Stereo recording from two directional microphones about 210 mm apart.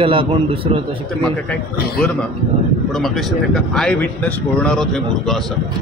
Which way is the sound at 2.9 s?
Centre (ahead or behind).